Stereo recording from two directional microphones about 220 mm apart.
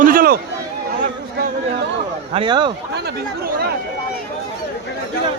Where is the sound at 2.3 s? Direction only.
20° right (ahead or behind).